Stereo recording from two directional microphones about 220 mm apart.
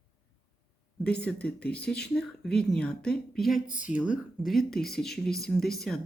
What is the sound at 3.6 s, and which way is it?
Speech, 35° left (ahead or behind).